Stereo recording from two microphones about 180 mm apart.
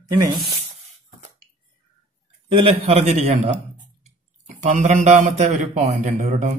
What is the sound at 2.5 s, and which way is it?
A man's voice, 30° right (ahead or behind).